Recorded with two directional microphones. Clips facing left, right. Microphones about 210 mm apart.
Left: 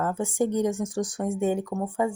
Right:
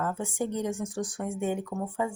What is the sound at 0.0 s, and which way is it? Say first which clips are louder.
A woman's voice: left 5 dB; 40° left (ahead or behind).